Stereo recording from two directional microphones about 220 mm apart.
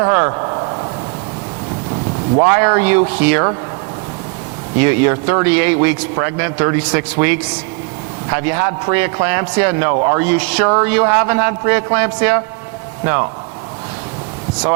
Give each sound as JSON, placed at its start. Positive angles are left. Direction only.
{"t": 0.0, "sound": "a sound", "side_deg": -25}
{"t": 2.3, "sound": "a man's voice", "side_deg": -25}
{"t": 4.8, "sound": "a man's voice", "side_deg": -15}
{"t": 10.2, "sound": "a man's voice", "side_deg": -10}